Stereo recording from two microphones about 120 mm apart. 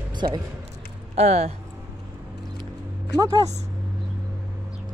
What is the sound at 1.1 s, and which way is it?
Speech, 65° right (ahead or behind).